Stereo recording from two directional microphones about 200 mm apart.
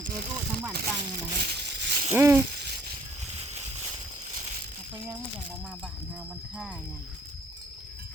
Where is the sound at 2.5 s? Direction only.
55° right (ahead or behind).